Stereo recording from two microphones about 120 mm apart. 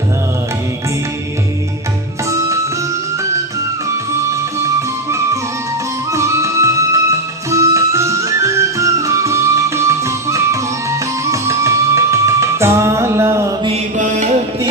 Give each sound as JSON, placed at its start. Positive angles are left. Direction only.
{"t": 6.1, "sound": "music", "side_deg": -25}
{"t": 13.9, "sound": "music", "side_deg": -90}